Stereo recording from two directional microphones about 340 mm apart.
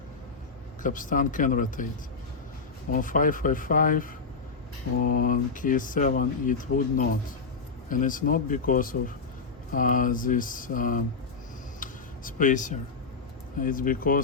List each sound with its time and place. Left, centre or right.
0.8 s speech: left
2.9 s speech: left
11.8 s a sound: left
13.6 s speech: left